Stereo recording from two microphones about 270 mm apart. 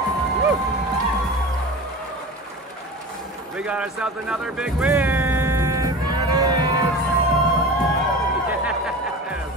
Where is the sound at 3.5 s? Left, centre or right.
Centre.